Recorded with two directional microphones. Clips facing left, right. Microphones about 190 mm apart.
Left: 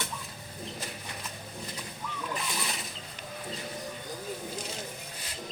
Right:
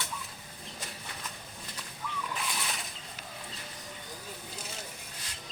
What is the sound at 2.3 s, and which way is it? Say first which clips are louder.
Bird: left 2 dB; centre (ahead or behind).